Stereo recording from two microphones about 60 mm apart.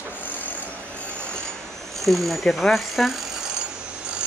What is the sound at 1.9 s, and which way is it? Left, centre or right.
Speech, centre.